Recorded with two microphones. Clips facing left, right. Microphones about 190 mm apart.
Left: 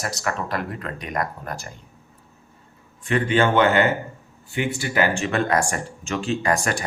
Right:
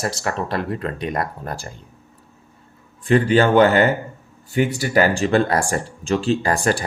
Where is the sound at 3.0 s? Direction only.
35° right (ahead or behind).